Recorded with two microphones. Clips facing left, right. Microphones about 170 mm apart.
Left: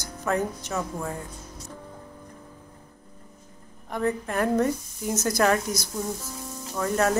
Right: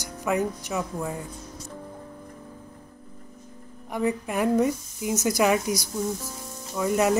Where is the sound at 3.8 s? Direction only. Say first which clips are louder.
Right 1 dB; 10° right (ahead or behind).